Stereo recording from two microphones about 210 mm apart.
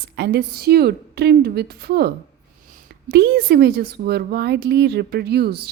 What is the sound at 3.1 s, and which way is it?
A woman's voice, 50° right (ahead or behind).